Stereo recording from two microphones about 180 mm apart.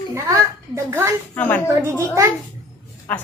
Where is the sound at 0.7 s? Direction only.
15° right (ahead or behind).